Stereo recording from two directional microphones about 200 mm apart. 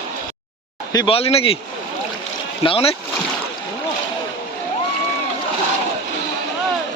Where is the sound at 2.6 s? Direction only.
30° left (ahead or behind).